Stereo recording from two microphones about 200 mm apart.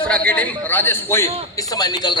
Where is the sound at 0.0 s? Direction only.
5° left (ahead or behind).